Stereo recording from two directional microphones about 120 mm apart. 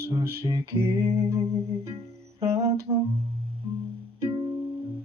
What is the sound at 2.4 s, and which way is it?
Humming, 25° right (ahead or behind).